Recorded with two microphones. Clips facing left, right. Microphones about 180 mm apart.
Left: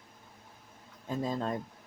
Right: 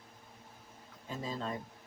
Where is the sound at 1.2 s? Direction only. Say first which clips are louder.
Left 6 dB; 45° left (ahead or behind).